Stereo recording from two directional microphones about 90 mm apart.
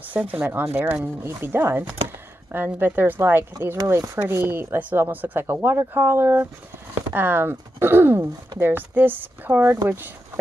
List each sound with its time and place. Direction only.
0.3 s speech: 20° right (ahead or behind)
3.7 s speech: 35° right (ahead or behind)